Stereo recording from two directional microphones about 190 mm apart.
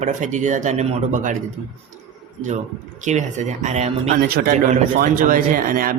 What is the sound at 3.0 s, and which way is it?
A man's voice, 40° right (ahead or behind).